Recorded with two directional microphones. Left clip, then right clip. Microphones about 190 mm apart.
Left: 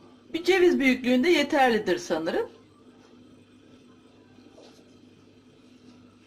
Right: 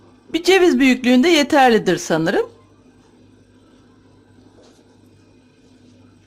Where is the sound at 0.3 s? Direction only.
50° right (ahead or behind).